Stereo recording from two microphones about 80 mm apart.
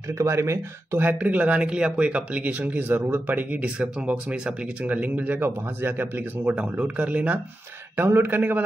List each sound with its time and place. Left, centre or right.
0.2 s speech: right
1.0 s speech: centre
6.5 s speech: centre